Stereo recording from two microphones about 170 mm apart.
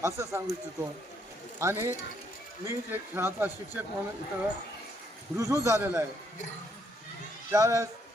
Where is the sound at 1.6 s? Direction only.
15° right (ahead or behind).